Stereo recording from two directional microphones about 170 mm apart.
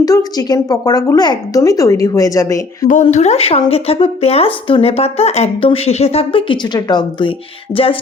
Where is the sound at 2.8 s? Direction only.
45° left (ahead or behind).